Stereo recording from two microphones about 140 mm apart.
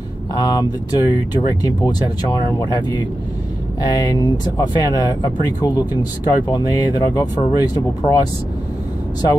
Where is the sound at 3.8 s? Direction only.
25° left (ahead or behind).